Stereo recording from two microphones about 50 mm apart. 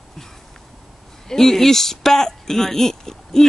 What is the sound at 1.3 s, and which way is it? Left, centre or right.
Speech, centre.